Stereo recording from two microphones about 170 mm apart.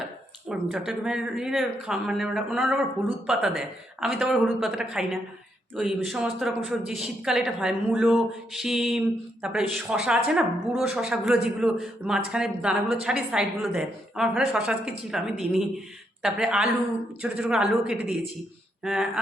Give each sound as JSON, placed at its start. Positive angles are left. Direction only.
{"t": 0.4, "sound": "speech", "side_deg": -5}